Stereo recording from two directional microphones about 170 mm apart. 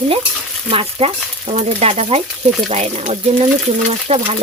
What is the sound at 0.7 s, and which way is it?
Speech, 35° right (ahead or behind).